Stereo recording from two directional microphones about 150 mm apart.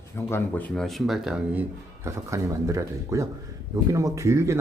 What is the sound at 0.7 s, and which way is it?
Speech, centre (ahead or behind).